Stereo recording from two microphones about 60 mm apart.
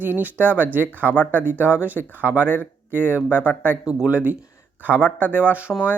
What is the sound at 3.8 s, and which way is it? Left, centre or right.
Speech, centre.